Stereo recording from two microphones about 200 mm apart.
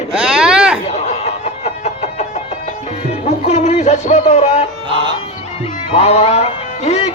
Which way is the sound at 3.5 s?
35° left (ahead or behind).